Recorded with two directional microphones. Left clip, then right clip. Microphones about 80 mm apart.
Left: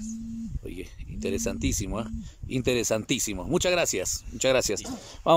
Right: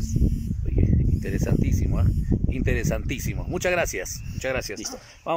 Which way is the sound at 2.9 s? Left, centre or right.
Left.